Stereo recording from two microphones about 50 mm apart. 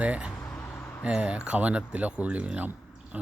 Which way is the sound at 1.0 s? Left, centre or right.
Centre.